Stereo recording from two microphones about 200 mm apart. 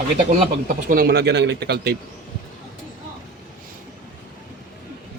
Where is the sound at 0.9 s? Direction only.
50° right (ahead or behind).